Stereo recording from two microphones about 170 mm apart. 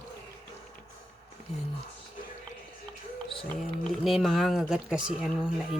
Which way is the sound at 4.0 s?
Centre (ahead or behind).